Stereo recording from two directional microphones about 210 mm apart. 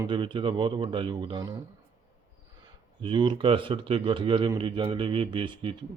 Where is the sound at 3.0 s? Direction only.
25° right (ahead or behind).